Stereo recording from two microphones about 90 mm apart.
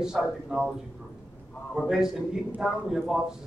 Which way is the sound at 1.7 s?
5° right (ahead or behind).